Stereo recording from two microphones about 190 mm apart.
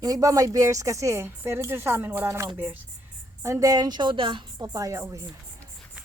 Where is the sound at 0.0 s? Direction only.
20° right (ahead or behind).